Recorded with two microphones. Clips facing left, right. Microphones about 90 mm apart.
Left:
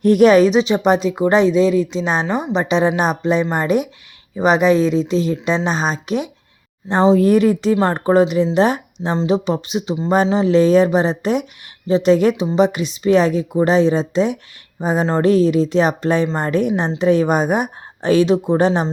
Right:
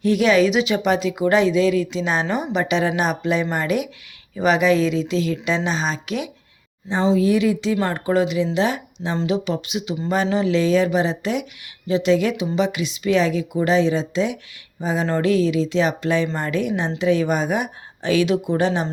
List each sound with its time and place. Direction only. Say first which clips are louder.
0.0 s speech: left 6 dB; 45° left (ahead or behind)